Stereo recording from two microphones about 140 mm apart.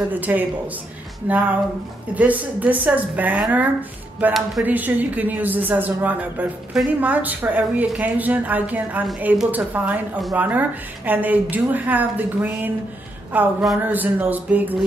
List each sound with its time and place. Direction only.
0.1 s a woman's voice: 10° right (ahead or behind)
2.1 s a woman's voice: 10° right (ahead or behind)